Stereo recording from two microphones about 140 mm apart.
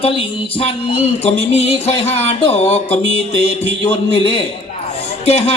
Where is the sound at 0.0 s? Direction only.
45° left (ahead or behind).